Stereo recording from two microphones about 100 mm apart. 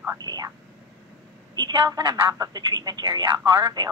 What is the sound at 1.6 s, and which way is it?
Speech, 50° right (ahead or behind).